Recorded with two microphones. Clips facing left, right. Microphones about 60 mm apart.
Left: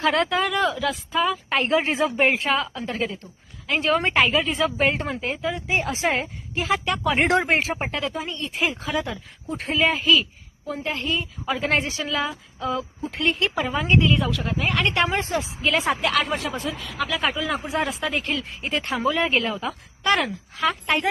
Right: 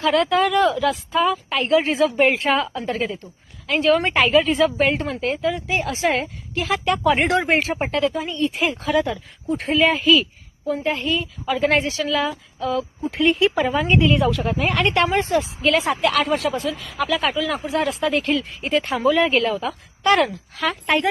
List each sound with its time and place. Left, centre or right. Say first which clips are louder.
0.0 s a woman's voice: right 2 dB; left
0.3 s a woman's voice: right 5 dB; centre
1.5 s a woman's voice: right 3 dB; left
2.0 s a woman's voice: right 3 dB; centre
2.4 s a woman's voice: right 3 dB; centre
5.6 s a woman's voice: right 2 dB; left
6.7 s a woman's voice: right 4 dB; centre